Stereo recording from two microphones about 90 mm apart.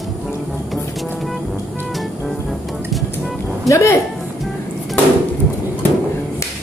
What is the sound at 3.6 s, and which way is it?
Speech, 35° left (ahead or behind).